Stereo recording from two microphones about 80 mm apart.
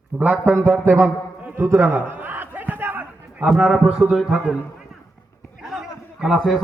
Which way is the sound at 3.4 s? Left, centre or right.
Centre.